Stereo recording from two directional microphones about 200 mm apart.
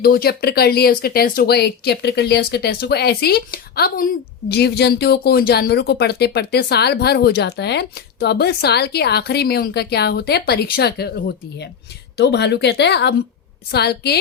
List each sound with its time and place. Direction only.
0.0 s speech: 50° left (ahead or behind)
12.1 s speech: 60° left (ahead or behind)